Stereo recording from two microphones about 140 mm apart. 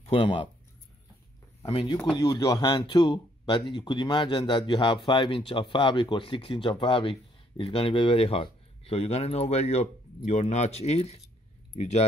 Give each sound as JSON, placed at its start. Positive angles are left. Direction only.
{"t": 0.0, "sound": "speech", "side_deg": 40}
{"t": 1.7, "sound": "speech", "side_deg": 40}
{"t": 2.0, "sound": "speech", "side_deg": 30}